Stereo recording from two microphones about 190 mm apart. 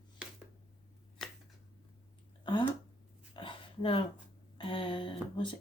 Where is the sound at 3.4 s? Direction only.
25° left (ahead or behind).